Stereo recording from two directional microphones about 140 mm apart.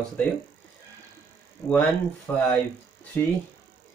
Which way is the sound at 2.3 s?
15° left (ahead or behind).